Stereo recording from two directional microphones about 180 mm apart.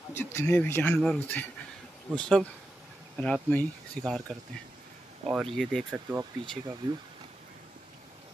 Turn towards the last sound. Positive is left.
turn(degrees=-15)  # may be behind; listen again after turning